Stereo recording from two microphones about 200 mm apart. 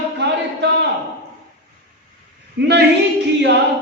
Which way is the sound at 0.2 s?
60° right (ahead or behind).